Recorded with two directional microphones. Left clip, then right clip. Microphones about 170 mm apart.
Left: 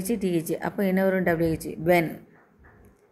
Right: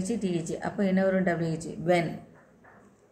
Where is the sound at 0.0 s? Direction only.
50° left (ahead or behind).